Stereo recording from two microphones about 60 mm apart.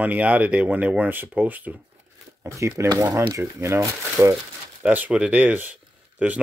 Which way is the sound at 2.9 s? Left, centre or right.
Right.